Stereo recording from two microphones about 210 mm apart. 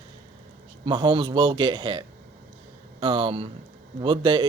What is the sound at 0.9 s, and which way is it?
A man's voice, 20° right (ahead or behind).